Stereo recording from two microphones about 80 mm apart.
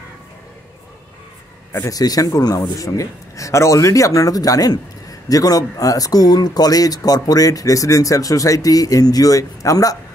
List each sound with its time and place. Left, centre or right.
1.9 s speech: left